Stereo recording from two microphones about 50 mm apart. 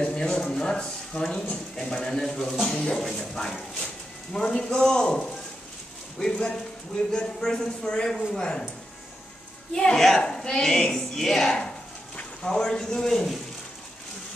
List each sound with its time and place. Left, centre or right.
0.0 s a sound: centre
1.5 s a woman's voice: centre
9.8 s a woman's voice: centre